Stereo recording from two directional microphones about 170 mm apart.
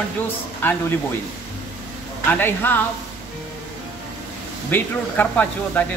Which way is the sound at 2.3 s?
10° left (ahead or behind).